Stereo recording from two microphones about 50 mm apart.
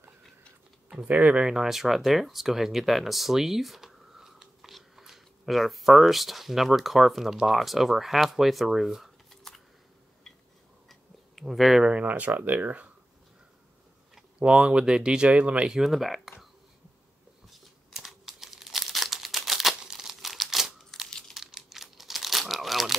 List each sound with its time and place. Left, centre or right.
0.9 s speech: right
1.4 s speech: centre
9.3 s a sound: centre
10.9 s tick-tock: centre
11.8 s speech: right
14.4 s speech: centre
15.7 s speech: centre
17.5 s crumpling: centre